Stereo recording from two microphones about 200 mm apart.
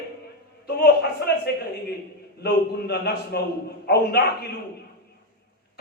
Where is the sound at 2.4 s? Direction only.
55° left (ahead or behind).